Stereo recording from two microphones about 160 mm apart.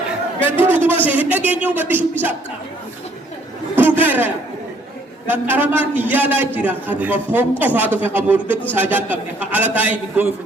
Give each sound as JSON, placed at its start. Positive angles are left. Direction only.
{"t": 0.6, "sound": "a man's voice", "side_deg": -10}
{"t": 3.8, "sound": "a sound", "side_deg": -10}
{"t": 5.3, "sound": "a man's voice", "side_deg": -10}